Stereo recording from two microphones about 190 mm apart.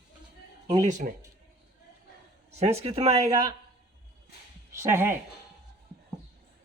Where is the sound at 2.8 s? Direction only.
30° right (ahead or behind).